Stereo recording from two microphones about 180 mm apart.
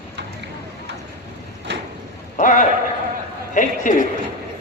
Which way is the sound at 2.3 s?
45° left (ahead or behind).